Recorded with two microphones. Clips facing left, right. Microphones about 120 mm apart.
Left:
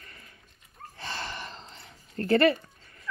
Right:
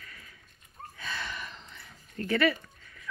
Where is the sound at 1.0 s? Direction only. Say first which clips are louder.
Left 2 dB; 30° left (ahead or behind).